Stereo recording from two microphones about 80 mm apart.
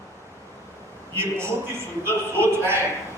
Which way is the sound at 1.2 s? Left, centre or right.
Right.